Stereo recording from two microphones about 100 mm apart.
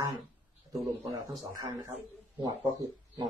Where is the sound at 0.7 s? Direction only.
35° right (ahead or behind).